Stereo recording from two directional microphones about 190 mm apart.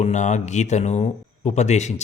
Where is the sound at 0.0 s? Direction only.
40° left (ahead or behind).